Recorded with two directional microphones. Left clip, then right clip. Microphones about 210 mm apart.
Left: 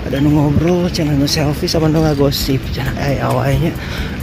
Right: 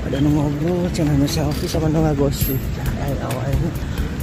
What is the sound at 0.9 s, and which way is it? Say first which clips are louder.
Speech: left 4 dB; 5° left (ahead or behind).